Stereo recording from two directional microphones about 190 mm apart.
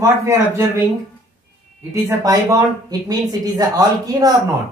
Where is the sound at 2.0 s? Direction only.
20° right (ahead or behind).